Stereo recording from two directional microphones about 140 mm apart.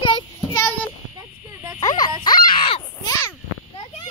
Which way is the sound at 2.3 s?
40° left (ahead or behind).